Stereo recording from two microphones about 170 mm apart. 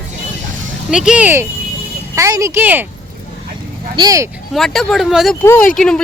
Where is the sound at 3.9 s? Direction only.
20° right (ahead or behind).